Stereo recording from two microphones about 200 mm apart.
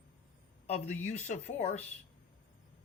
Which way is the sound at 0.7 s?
35° left (ahead or behind).